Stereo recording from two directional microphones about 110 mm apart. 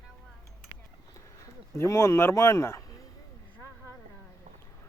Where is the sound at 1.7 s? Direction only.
25° left (ahead or behind).